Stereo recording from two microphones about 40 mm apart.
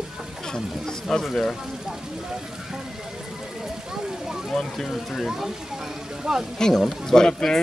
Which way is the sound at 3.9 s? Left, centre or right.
Centre.